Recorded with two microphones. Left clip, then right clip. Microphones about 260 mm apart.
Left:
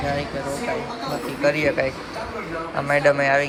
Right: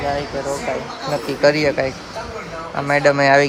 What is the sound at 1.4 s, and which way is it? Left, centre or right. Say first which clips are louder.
Speech: right 4 dB; centre.